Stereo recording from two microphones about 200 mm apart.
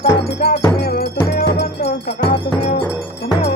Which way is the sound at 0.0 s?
55° left (ahead or behind).